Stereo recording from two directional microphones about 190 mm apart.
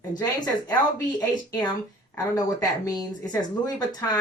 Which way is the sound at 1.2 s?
20° left (ahead or behind).